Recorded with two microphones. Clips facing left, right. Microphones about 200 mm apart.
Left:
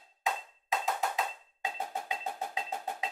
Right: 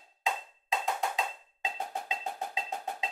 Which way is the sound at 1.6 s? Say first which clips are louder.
Even; 20° right (ahead or behind).